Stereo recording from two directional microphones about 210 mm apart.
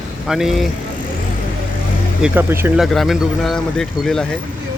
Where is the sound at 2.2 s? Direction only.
10° right (ahead or behind).